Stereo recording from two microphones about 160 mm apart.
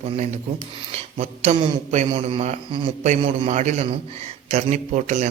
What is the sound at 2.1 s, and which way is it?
A man's voice, 30° right (ahead or behind).